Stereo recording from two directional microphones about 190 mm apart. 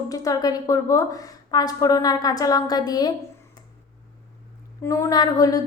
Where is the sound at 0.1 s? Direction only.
20° left (ahead or behind).